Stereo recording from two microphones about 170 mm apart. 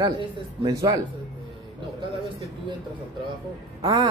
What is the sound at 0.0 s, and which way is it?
Speech, 25° right (ahead or behind).